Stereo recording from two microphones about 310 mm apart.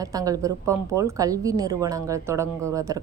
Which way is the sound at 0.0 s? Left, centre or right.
Centre.